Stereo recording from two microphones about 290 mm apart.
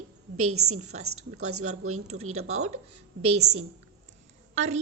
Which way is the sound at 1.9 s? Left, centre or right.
Right.